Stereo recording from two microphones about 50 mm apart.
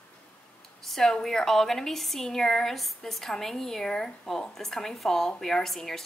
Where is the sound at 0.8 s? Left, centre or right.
Centre.